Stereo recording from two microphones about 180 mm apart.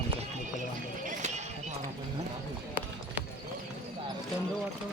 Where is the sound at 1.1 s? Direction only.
40° right (ahead or behind).